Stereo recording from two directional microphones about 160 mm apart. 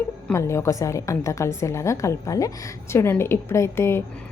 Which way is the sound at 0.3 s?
15° left (ahead or behind).